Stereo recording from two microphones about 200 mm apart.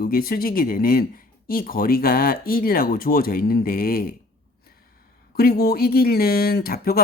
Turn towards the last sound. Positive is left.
turn(degrees=50)  # may be behind; listen again after turning